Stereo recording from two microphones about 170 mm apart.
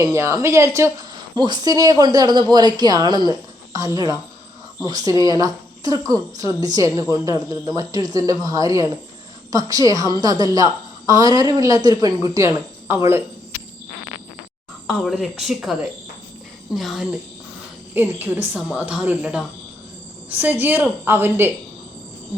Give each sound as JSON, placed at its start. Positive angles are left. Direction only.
{"t": 0.0, "sound": "speech", "side_deg": -15}
{"t": 14.8, "sound": "speech", "side_deg": 0}
{"t": 17.9, "sound": "a woman's voice", "side_deg": -10}